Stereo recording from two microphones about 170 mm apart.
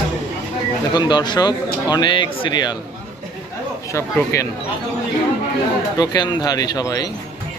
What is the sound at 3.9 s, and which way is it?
Speech, 15° left (ahead or behind).